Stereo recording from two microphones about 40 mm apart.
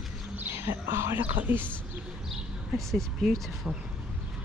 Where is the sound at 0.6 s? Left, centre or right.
Right.